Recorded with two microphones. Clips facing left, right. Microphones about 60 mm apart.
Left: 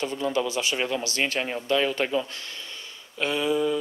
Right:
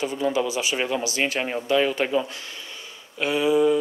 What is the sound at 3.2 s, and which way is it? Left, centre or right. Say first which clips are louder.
Speech: right 5 dB; centre.